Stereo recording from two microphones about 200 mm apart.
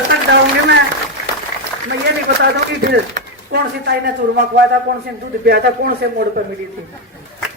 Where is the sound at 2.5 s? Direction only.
50° right (ahead or behind).